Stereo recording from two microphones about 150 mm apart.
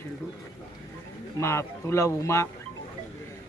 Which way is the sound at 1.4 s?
20° left (ahead or behind).